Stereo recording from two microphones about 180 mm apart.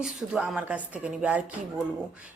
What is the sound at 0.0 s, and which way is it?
Speech, 5° right (ahead or behind).